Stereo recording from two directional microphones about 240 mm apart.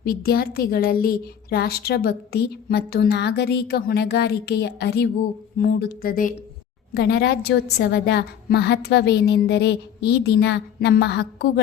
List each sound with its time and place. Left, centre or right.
0.0 s a woman's voice: left